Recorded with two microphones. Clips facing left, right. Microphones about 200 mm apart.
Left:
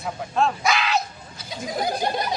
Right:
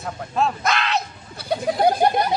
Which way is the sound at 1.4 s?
60° right (ahead or behind).